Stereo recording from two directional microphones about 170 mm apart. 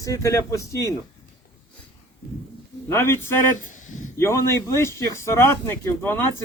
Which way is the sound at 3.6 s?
50° left (ahead or behind).